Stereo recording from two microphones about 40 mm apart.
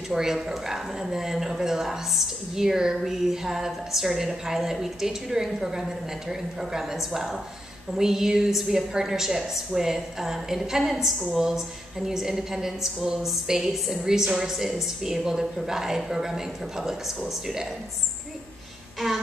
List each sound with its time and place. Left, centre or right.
0.1 s speech: centre
18.9 s music: centre